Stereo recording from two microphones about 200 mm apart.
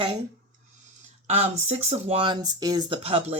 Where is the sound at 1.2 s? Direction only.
35° right (ahead or behind).